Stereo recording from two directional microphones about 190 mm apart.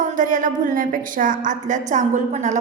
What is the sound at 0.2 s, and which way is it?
A woman's voice, 40° right (ahead or behind).